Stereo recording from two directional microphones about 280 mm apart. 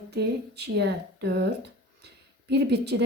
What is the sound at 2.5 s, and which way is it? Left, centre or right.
Speech, right.